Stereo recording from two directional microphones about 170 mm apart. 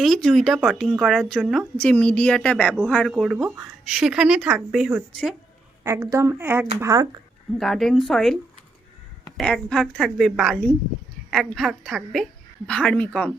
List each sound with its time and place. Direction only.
0.0 s a woman's voice: centre (ahead or behind); by 7.1 s 20° right (ahead or behind)
7.6 s a woman's voice: centre (ahead or behind)
9.4 s a woman's voice: 5° left (ahead or behind)